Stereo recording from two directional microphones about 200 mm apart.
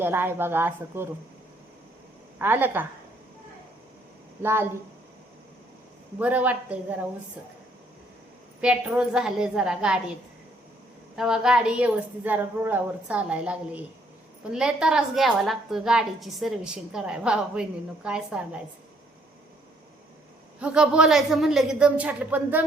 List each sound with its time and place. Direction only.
0.0 s speech: 10° right (ahead or behind)
2.4 s speech: 10° right (ahead or behind)
4.4 s speech: 10° right (ahead or behind)
6.1 s speech: 10° right (ahead or behind)
8.6 s a woman's voice: 5° right (ahead or behind)
11.2 s a woman's voice: 5° right (ahead or behind)
20.6 s a woman's voice: 5° right (ahead or behind)